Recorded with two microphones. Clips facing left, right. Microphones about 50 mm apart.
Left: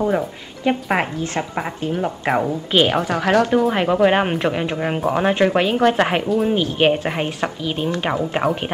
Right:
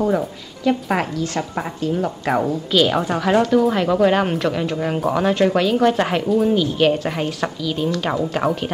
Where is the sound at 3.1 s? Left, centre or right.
Left.